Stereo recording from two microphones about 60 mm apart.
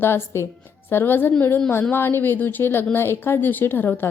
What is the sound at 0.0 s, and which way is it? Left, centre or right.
Speech, left.